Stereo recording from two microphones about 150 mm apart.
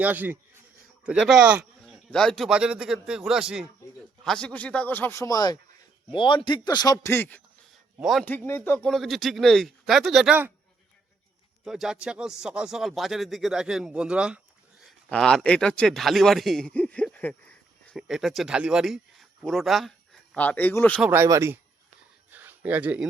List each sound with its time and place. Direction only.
0.0 s a man's voice: 10° right (ahead or behind)
1.8 s a man's voice: 5° left (ahead or behind)
7.9 s speech: centre (ahead or behind)
8.2 s a man's voice: 10° left (ahead or behind)
8.9 s a man's voice: centre (ahead or behind)
11.6 s a man's voice: 5° right (ahead or behind)
20.3 s a man's voice: 10° left (ahead or behind)
21.0 s speech: 15° right (ahead or behind)
22.3 s a sound: 10° right (ahead or behind)